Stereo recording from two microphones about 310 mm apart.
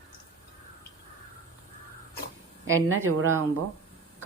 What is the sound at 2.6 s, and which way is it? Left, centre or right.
Speech, right.